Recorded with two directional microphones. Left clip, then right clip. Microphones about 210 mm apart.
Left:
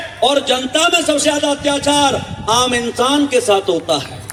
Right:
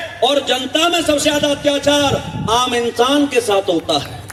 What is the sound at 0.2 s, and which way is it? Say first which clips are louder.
A man's voice: left 1 dB; 25° left (ahead or behind).